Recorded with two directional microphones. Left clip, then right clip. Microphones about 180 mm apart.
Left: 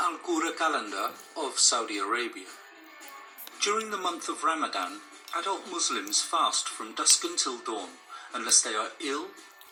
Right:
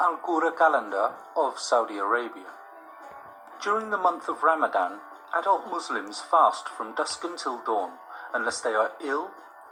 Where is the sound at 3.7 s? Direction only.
30° left (ahead or behind).